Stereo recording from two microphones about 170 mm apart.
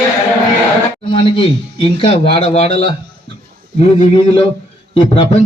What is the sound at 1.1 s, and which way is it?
A man's voice, 30° left (ahead or behind).